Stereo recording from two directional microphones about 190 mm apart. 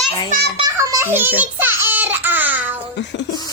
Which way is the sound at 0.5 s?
20° right (ahead or behind).